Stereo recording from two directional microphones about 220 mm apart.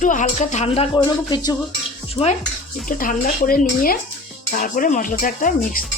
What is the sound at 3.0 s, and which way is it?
Speech, 40° left (ahead or behind).